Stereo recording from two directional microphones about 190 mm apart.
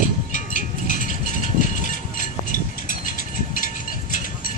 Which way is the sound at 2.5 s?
45° left (ahead or behind).